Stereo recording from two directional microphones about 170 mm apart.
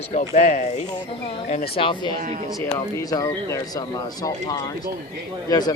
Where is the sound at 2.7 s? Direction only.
20° left (ahead or behind).